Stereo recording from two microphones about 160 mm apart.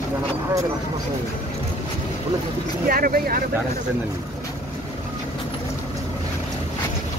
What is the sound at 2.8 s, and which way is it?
Speech, 65° right (ahead or behind).